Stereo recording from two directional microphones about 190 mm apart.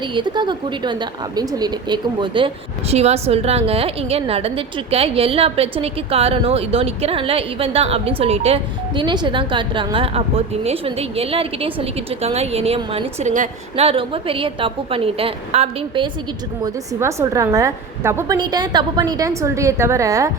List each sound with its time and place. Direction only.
0.0 s a woman's voice: 25° right (ahead or behind)
17.0 s a woman's voice: 15° right (ahead or behind)